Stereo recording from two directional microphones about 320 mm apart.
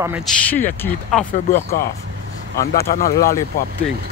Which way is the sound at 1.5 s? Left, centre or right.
Left.